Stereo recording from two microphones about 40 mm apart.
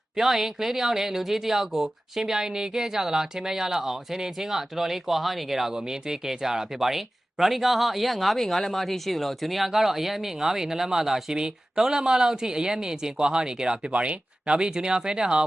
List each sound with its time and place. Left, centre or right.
0.2 s speech: centre